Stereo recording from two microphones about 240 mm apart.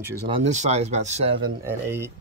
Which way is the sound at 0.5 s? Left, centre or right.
Right.